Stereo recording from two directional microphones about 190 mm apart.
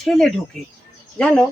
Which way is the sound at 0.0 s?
Centre (ahead or behind).